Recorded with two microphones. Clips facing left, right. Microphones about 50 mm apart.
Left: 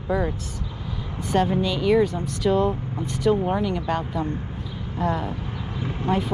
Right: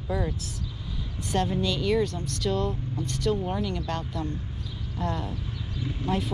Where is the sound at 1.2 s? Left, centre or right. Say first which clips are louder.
Left 5 dB; centre.